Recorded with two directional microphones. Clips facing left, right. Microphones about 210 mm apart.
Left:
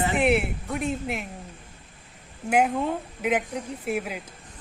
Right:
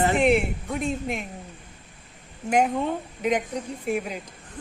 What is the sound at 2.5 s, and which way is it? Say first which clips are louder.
A woman's voice: even; 5° left (ahead or behind).